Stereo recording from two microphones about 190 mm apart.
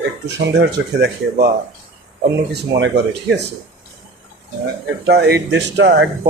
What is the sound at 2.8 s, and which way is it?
Speech, 65° right (ahead or behind).